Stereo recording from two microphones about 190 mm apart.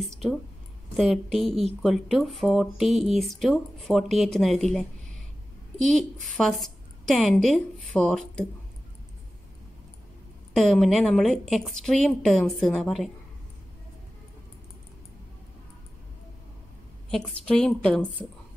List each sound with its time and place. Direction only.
0.0 s speech: centre (ahead or behind)
10.5 s speech: centre (ahead or behind)
17.5 s speech: 5° left (ahead or behind)